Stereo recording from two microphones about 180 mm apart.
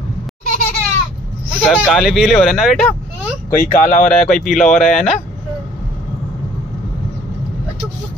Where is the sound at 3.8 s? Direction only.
45° left (ahead or behind).